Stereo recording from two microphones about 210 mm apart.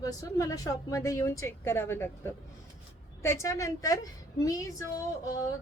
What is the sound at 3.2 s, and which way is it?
A woman's voice, 15° left (ahead or behind).